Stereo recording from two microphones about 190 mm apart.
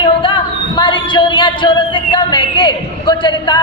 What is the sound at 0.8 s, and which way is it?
Speech, 25° left (ahead or behind).